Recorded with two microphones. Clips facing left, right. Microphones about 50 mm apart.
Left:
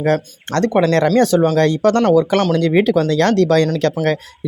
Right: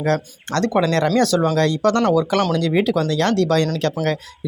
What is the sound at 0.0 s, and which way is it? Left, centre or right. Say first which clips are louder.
Speech: left 3 dB; left.